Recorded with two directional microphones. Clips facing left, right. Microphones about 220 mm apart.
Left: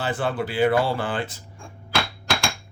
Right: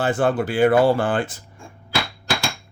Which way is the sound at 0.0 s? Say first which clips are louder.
Right 6 dB; 45° right (ahead or behind).